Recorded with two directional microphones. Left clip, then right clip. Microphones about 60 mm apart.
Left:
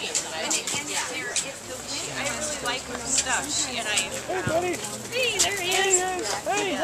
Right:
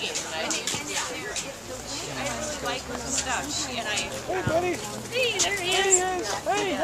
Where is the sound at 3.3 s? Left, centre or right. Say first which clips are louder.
Left 2 dB; centre.